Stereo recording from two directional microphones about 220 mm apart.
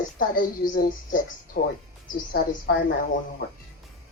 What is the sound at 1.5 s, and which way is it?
Speech, 50° left (ahead or behind).